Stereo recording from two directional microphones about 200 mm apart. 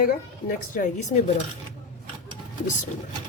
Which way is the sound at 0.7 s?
40° left (ahead or behind).